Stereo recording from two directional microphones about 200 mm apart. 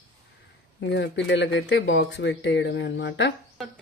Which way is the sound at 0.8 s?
60° left (ahead or behind).